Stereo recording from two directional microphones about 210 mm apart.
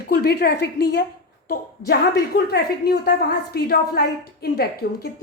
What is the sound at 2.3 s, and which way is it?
A woman's voice, 50° left (ahead or behind).